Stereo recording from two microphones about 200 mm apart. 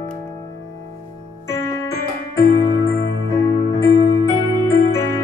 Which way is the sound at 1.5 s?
15° left (ahead or behind).